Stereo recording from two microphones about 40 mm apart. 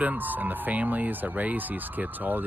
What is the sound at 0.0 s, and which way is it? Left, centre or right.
Speech, right.